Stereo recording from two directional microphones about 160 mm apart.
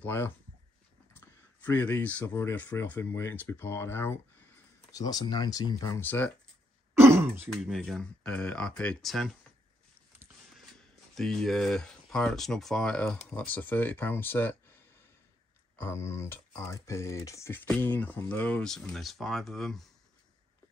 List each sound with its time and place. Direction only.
0.0 s speech: 15° left (ahead or behind)
7.0 s speech: 15° right (ahead or behind)
7.4 s speech: centre (ahead or behind)
11.1 s speech: centre (ahead or behind)
15.8 s speech: 15° left (ahead or behind); by 19.9 s centre (ahead or behind)